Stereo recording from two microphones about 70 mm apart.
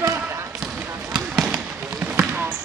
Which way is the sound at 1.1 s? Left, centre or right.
Centre.